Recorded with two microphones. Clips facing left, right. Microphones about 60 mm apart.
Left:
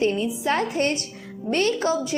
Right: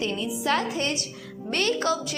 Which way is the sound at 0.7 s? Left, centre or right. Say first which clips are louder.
Left 4 dB; left.